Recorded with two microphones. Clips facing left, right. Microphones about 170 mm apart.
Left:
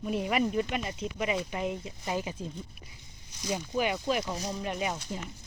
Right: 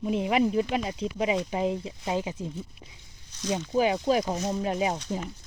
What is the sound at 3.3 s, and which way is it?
Speech, 10° left (ahead or behind).